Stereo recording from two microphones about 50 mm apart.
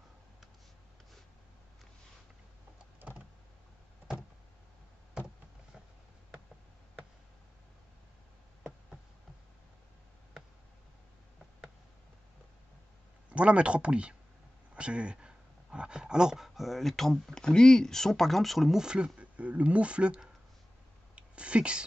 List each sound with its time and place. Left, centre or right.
13.3 s speech: right; by 18.8 s centre
18.8 s speech: centre
21.1 s a sound: right